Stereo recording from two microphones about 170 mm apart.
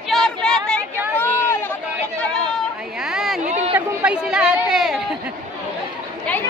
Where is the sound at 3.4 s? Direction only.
45° right (ahead or behind).